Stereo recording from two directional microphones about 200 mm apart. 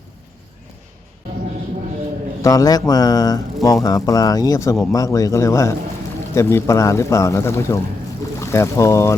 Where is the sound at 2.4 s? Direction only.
20° left (ahead or behind).